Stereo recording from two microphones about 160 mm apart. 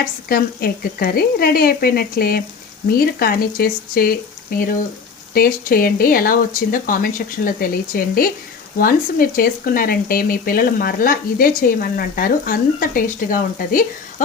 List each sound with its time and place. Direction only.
0.3 s speech: 70° left (ahead or behind)
5.3 s speech: 65° left (ahead or behind)